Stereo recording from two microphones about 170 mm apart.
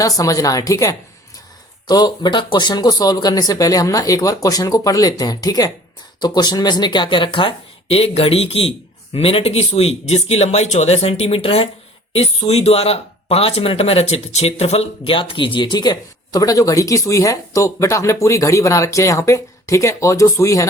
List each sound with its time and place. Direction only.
0.0 s speech: 20° left (ahead or behind)